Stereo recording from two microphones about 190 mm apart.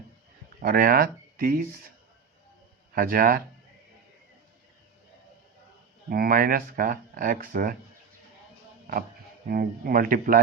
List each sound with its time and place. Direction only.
0.6 s speech: 50° right (ahead or behind)
2.9 s speech: 50° right (ahead or behind)
6.1 s speech: 50° right (ahead or behind)
9.5 s speech: 50° right (ahead or behind)